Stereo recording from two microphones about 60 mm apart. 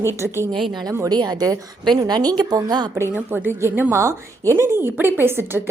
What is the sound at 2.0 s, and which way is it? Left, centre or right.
Speech, right.